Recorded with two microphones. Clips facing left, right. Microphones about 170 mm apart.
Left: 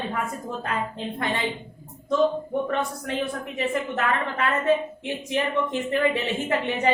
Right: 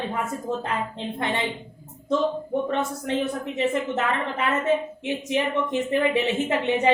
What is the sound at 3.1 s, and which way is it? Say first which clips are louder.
A woman's voice: right 3 dB; 25° right (ahead or behind).